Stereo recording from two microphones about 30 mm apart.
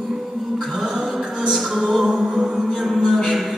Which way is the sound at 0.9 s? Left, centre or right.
Centre.